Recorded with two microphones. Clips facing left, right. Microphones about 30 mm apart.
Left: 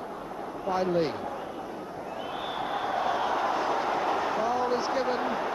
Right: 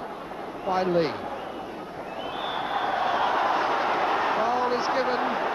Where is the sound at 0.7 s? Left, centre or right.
Right.